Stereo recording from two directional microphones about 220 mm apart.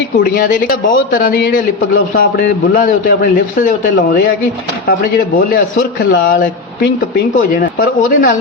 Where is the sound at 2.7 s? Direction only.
40° left (ahead or behind).